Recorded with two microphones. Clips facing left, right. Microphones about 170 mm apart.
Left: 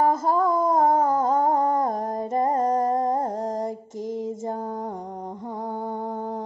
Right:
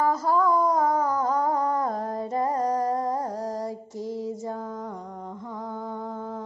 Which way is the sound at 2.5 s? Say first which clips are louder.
Left 3 dB; 25° left (ahead or behind).